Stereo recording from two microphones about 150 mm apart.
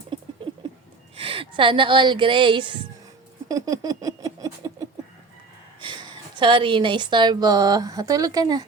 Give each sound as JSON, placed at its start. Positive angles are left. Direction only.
{"t": 1.1, "sound": "speech", "side_deg": -35}
{"t": 3.5, "sound": "a sound", "side_deg": -25}
{"t": 5.8, "sound": "a woman's voice", "side_deg": -30}